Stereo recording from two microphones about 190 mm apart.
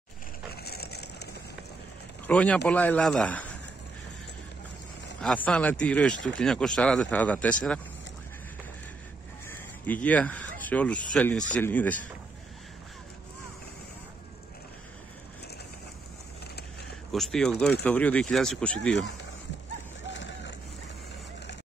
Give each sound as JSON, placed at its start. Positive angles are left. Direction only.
{"t": 0.5, "sound": "a sound", "side_deg": 55}
{"t": 2.2, "sound": "a man's voice", "side_deg": 5}
{"t": 5.2, "sound": "a man's voice", "side_deg": 5}
{"t": 9.5, "sound": "speech", "side_deg": 10}
{"t": 17.1, "sound": "a man's voice", "side_deg": 0}
{"t": 20.1, "sound": "a sound", "side_deg": 75}